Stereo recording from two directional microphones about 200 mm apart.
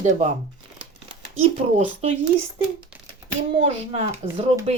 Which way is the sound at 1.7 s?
35° right (ahead or behind).